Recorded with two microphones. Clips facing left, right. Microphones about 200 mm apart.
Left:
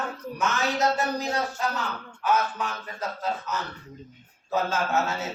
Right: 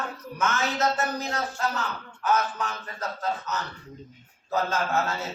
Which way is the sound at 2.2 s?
10° left (ahead or behind).